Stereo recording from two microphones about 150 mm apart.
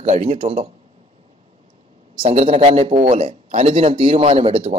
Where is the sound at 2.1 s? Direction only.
40° right (ahead or behind).